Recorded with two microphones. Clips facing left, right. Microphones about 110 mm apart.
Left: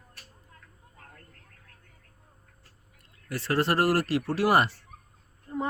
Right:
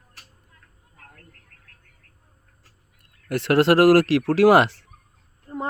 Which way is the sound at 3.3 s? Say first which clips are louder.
Right 9 dB; 70° right (ahead or behind).